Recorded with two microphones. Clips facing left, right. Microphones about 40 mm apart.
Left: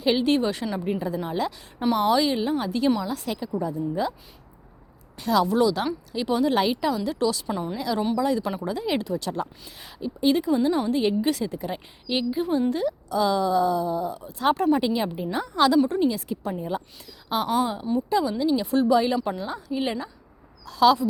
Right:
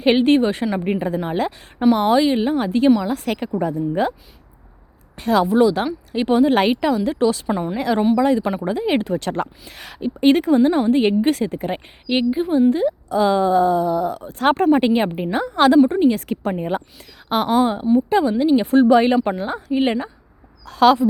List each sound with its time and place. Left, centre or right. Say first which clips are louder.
0.0 s speech: right 7 dB; right
0.8 s speech: right 5 dB; right
3.6 s speech: right 6 dB; right
5.1 s a woman's voice: right 5 dB; right
7.8 s a woman's voice: right 8 dB; right
10.0 s speech: right 7 dB; right
13.8 s a woman's voice: right 7 dB; right
16.1 s a woman's voice: right 7 dB; right